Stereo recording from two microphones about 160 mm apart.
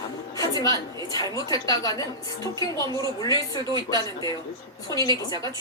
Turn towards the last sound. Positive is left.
turn(degrees=20)  # may be behind; listen again after turning